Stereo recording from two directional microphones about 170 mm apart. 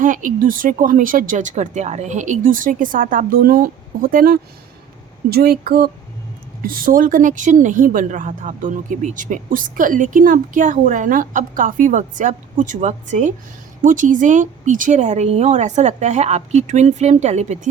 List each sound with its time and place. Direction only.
0.0 s a woman's voice: 50° right (ahead or behind)